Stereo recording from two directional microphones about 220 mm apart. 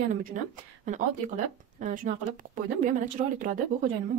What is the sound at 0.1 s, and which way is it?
Speech, 40° right (ahead or behind).